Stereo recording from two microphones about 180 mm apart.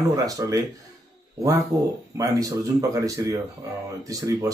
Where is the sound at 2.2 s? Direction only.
20° right (ahead or behind).